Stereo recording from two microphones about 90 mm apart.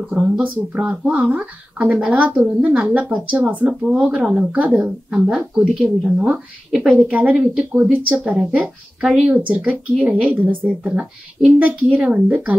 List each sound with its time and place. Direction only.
0.1 s a woman's voice: 15° right (ahead or behind)
7.0 s a woman's voice: 20° right (ahead or behind)